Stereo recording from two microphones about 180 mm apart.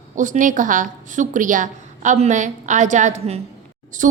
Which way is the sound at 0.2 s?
45° right (ahead or behind).